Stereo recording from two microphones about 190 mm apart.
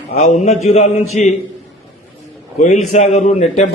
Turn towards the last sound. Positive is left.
turn(degrees=35)  # may be behind; listen again after turning